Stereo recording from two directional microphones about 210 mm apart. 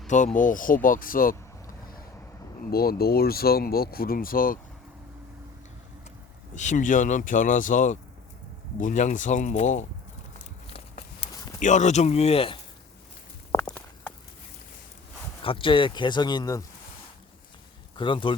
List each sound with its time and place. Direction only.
0.3 s speech: 40° left (ahead or behind)
2.6 s speech: 45° left (ahead or behind)
6.6 s speech: 35° left (ahead or behind)
11.6 s speech: 35° left (ahead or behind)
13.5 s walk: 20° left (ahead or behind)
15.4 s speech: 25° left (ahead or behind)
17.9 s speech: 25° left (ahead or behind)